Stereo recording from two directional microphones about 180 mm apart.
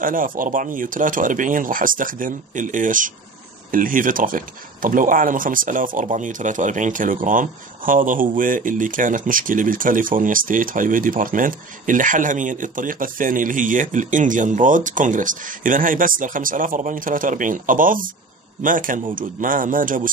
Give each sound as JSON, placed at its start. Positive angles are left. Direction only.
{"t": 0.0, "sound": "speech", "side_deg": -50}